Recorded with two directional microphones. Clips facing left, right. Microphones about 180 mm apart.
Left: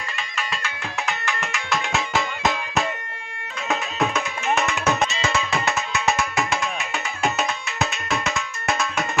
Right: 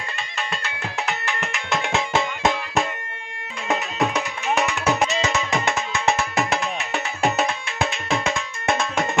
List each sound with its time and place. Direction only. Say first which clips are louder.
1.3 s music: even; 20° right (ahead or behind)
3.7 s music: right 1 dB; 15° right (ahead or behind)